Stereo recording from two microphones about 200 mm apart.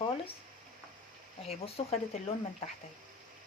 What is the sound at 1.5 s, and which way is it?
Speech, 30° left (ahead or behind).